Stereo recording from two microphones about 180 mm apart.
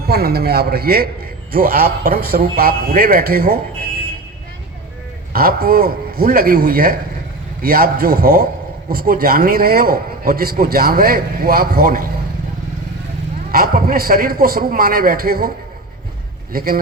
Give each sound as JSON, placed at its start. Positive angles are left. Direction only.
{"t": 0.1, "sound": "a man's voice", "side_deg": -60}
{"t": 5.3, "sound": "a man's voice", "side_deg": -55}
{"t": 13.5, "sound": "a man's voice", "side_deg": -55}